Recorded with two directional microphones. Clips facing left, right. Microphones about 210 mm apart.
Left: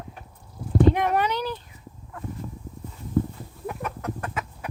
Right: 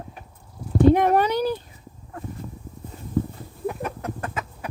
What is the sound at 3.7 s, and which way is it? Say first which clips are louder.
Chicken: right 3 dB; 30° right (ahead or behind).